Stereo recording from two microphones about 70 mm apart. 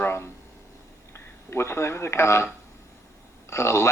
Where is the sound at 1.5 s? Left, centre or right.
Left.